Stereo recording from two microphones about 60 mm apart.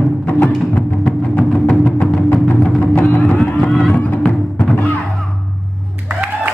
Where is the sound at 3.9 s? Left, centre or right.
Left.